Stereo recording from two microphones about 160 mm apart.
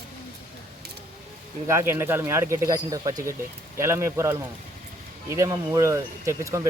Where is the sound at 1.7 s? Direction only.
15° right (ahead or behind).